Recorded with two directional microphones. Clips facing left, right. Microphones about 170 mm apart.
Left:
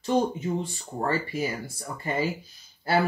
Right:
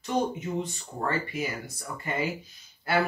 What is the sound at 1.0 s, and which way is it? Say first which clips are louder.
Speech: left 2 dB; 35° left (ahead or behind).